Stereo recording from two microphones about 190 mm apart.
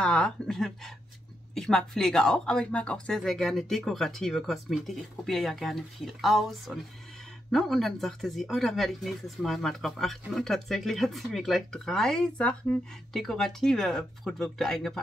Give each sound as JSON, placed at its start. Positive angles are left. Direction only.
{"t": 0.0, "sound": "speech", "side_deg": 5}